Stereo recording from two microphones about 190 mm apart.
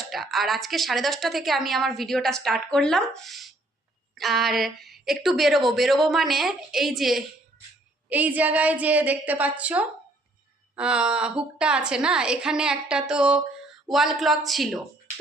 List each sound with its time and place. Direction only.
0.0 s a woman's voice: centre (ahead or behind)